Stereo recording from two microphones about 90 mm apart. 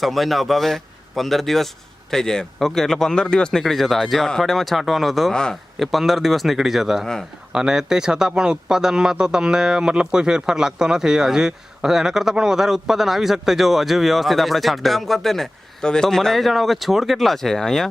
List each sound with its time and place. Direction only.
0.0 s speech: centre (ahead or behind)